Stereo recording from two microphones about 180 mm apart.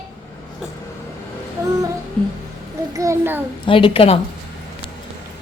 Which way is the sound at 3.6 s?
30° left (ahead or behind).